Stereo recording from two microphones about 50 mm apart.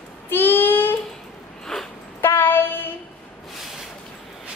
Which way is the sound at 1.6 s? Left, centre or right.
Centre.